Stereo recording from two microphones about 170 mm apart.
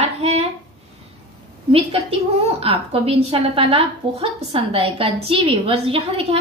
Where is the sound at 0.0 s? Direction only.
35° right (ahead or behind).